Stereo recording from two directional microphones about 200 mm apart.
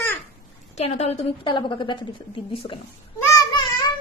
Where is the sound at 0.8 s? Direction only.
30° left (ahead or behind).